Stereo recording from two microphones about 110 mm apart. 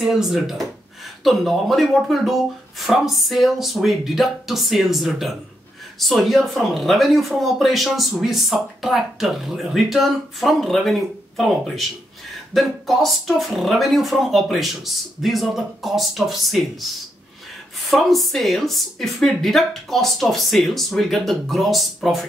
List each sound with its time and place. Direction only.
0.0 s speech: 5° right (ahead or behind)
17.8 s speech: centre (ahead or behind)